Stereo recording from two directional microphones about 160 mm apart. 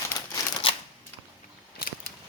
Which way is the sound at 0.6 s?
35° left (ahead or behind).